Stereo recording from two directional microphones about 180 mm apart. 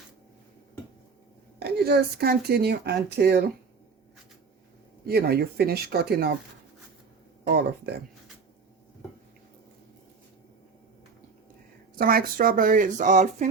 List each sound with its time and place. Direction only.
1.5 s speech: 65° right (ahead or behind)
5.0 s speech: 60° right (ahead or behind)
7.4 s speech: 65° right (ahead or behind)
11.9 s speech: 55° right (ahead or behind)